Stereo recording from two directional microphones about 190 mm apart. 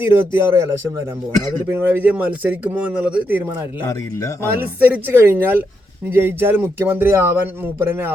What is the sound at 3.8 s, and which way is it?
Speech, 15° left (ahead or behind).